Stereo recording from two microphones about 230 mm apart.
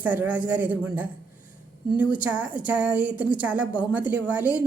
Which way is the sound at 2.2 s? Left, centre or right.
Centre.